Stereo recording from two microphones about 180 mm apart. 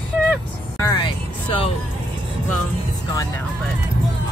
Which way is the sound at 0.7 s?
15° left (ahead or behind).